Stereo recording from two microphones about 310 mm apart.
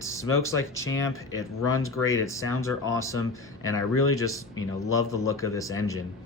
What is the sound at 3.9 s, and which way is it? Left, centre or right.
Speech, left.